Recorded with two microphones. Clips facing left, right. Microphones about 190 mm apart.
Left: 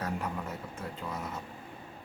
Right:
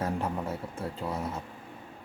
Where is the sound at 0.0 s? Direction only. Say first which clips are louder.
Right 4 dB; 30° right (ahead or behind).